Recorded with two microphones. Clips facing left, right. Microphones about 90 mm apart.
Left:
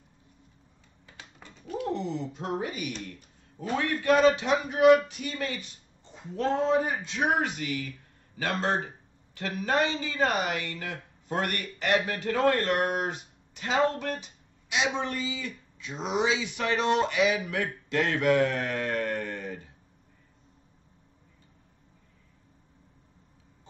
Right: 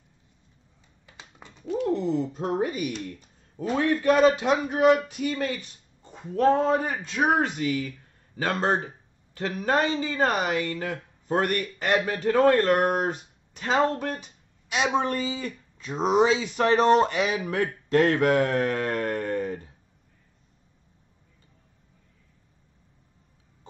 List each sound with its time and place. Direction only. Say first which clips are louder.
1.0 s dog: right 1 dB; 20° right (ahead or behind)
2.0 s speech: right 6 dB; 40° right (ahead or behind)